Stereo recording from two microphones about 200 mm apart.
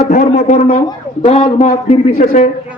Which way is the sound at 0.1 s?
35° left (ahead or behind).